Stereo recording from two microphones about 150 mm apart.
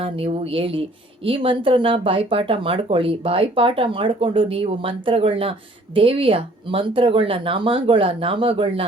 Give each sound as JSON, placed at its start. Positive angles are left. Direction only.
{"t": 0.0, "sound": "speech", "side_deg": -40}